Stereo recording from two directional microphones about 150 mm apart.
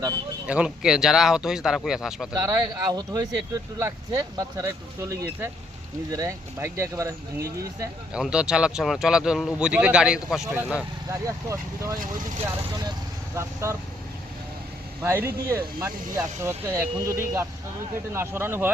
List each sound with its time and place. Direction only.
0.4 s a man's voice: 5° right (ahead or behind)
2.3 s speech: 25° right (ahead or behind)
8.1 s a man's voice: 5° right (ahead or behind)
11.1 s speech: 20° right (ahead or behind)
13.3 s speech: 20° right (ahead or behind)
15.0 s speech: 15° right (ahead or behind)